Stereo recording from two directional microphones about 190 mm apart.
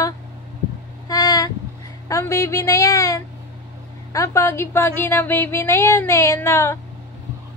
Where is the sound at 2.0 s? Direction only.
15° left (ahead or behind).